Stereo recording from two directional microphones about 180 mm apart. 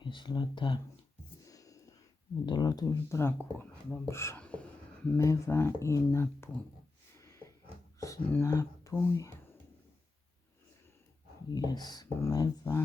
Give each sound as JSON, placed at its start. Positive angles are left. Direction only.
{"t": 0.0, "sound": "speech", "side_deg": 25}
{"t": 1.5, "sound": "a sound", "side_deg": 20}
{"t": 2.5, "sound": "speech", "side_deg": 20}
{"t": 7.9, "sound": "speech", "side_deg": 20}
{"t": 11.4, "sound": "speech", "side_deg": 20}